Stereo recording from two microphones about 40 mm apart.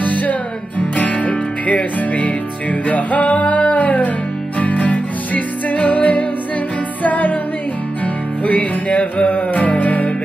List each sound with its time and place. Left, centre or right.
0.0 s music: left
8.5 s music: left